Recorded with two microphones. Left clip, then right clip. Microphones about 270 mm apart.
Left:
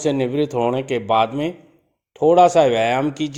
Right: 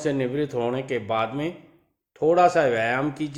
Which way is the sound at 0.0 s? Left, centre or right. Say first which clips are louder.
Left 5 dB; left.